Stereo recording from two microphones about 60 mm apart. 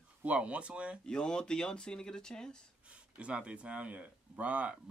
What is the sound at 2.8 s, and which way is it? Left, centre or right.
Speech, centre.